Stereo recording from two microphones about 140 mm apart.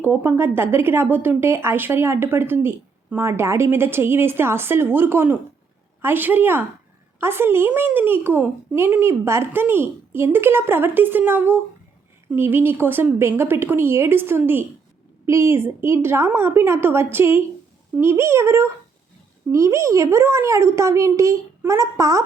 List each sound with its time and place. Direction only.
0.0 s a woman's voice: 15° right (ahead or behind)